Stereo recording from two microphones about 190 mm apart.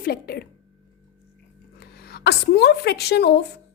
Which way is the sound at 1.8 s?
60° left (ahead or behind).